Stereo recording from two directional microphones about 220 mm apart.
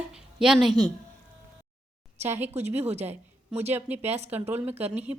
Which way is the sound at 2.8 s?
30° right (ahead or behind).